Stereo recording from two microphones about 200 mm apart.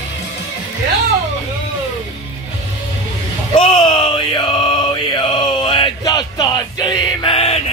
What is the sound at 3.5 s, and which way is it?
Chant, 25° left (ahead or behind).